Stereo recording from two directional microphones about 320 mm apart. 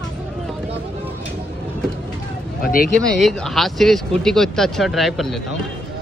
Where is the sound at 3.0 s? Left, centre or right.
Centre.